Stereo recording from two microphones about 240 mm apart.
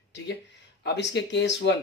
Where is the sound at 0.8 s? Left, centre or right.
Left.